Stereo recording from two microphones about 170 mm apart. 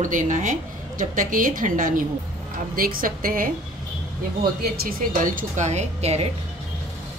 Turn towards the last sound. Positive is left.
turn(degrees=-40)  # may be behind; listen again after turning